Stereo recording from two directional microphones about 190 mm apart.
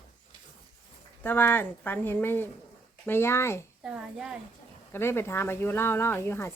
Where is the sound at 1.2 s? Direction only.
10° left (ahead or behind).